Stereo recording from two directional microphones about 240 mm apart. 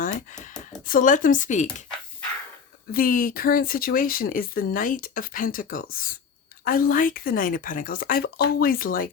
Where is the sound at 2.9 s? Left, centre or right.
Left.